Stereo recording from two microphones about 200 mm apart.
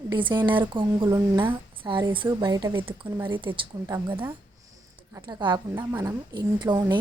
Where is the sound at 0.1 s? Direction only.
25° right (ahead or behind).